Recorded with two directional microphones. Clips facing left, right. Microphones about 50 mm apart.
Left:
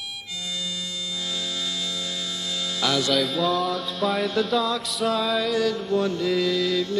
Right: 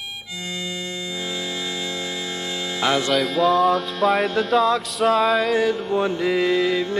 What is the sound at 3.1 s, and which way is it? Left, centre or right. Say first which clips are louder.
Music: right 4 dB; centre.